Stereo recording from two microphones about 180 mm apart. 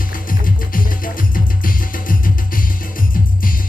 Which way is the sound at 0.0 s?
50° left (ahead or behind).